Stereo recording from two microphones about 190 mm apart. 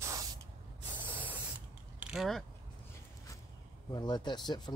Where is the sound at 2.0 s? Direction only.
Centre (ahead or behind).